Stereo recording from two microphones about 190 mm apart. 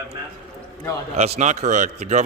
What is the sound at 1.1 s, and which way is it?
A man's voice, 35° right (ahead or behind).